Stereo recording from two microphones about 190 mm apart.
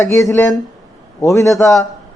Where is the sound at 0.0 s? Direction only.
15° left (ahead or behind).